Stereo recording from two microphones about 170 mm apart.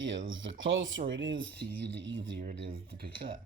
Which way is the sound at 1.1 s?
90° right.